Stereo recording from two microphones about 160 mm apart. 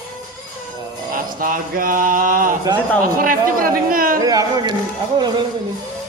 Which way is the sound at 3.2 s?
60° right (ahead or behind).